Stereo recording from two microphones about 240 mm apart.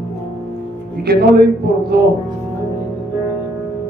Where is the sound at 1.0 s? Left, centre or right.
Right.